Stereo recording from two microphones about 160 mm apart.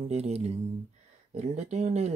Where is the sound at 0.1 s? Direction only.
40° right (ahead or behind).